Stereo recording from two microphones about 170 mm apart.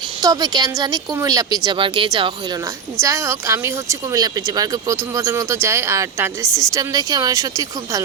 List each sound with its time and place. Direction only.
0.2 s speech: 20° right (ahead or behind)
3.0 s speech: 15° right (ahead or behind)